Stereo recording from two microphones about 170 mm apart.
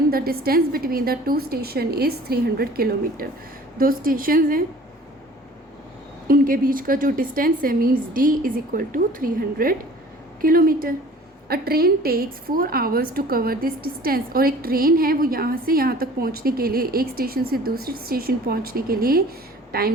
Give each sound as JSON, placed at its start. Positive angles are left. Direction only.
{"t": 0.1, "sound": "a woman's voice", "side_deg": -60}
{"t": 6.2, "sound": "a woman's voice", "side_deg": -60}